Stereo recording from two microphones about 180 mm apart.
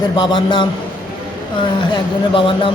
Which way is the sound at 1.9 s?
30° left (ahead or behind).